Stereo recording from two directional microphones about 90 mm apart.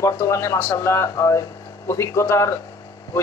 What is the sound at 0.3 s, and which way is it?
A man's voice, 35° left (ahead or behind).